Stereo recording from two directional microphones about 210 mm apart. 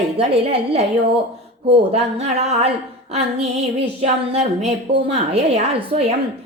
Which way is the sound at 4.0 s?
30° right (ahead or behind).